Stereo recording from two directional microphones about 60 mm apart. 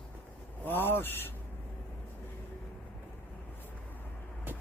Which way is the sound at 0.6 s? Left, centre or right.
Left.